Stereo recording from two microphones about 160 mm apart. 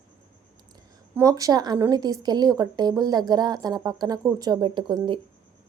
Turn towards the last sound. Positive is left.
turn(degrees=-30)  # may be behind; listen again after turning